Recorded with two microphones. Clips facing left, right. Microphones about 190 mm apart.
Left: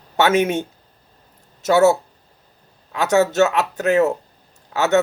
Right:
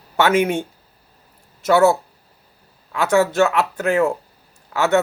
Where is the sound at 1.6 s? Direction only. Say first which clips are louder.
Even; 45° left (ahead or behind).